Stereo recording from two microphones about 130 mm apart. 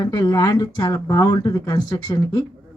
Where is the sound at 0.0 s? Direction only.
35° left (ahead or behind).